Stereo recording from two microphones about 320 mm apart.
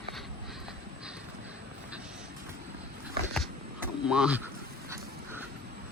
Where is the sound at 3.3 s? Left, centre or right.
Centre.